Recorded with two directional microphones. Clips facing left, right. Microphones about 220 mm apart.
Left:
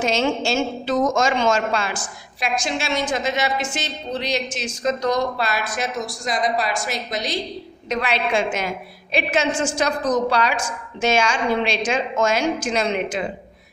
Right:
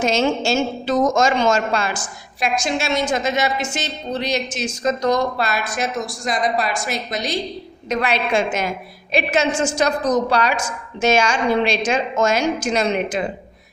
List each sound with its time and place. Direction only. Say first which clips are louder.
0.0 s a woman's voice: right 2 dB; 40° right (ahead or behind)